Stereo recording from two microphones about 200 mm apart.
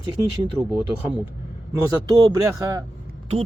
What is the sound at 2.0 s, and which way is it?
Speech, 15° right (ahead or behind).